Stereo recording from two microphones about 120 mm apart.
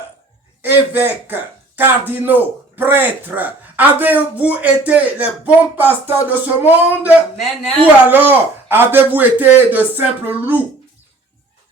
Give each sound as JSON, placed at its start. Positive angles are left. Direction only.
{"t": 0.6, "sound": "a man's voice", "side_deg": -15}
{"t": 7.3, "sound": "a man's voice", "side_deg": 5}
{"t": 8.1, "sound": "a man's voice", "side_deg": -15}